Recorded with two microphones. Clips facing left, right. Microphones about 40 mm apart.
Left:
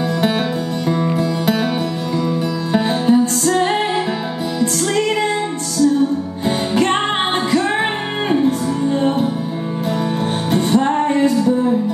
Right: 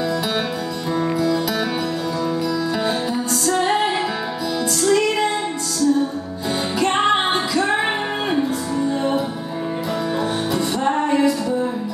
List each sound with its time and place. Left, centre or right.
1.1 s music: left
2.7 s music: left
6.7 s music: left